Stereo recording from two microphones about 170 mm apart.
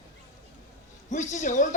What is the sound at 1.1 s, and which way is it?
Speech, 45° left (ahead or behind).